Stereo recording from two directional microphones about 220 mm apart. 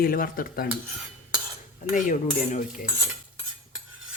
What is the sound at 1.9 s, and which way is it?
Speech, 35° left (ahead or behind).